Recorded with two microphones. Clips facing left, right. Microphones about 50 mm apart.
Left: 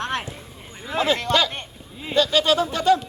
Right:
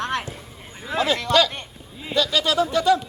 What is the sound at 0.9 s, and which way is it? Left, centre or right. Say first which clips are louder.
Speech: even; left.